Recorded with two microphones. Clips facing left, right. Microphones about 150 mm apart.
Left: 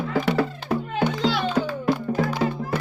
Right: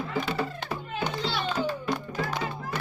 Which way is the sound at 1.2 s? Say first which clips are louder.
Left 7 dB; 90° left.